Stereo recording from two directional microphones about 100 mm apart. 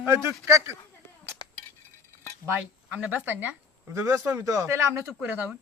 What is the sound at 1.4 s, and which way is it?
Cutlery, 45° left (ahead or behind).